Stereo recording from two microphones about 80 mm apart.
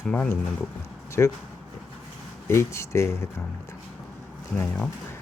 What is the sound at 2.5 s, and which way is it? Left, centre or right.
Speech, left.